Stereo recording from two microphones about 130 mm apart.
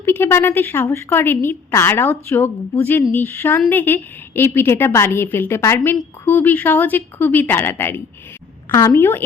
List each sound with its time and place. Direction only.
0.0 s a woman's voice: 20° left (ahead or behind)